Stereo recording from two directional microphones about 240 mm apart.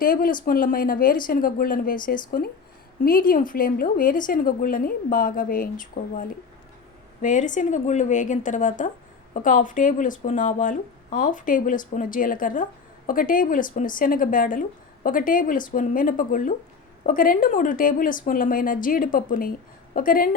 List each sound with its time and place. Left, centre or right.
0.0 s speech: left